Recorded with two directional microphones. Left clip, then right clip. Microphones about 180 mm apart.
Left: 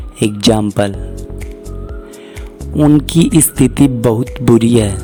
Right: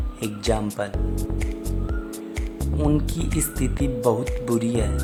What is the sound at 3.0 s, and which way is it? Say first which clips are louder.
A woman's voice: left 16 dB; 50° left (ahead or behind).